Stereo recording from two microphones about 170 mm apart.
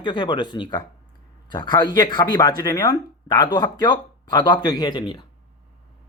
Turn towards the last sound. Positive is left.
turn(degrees=30)  # may be behind; listen again after turning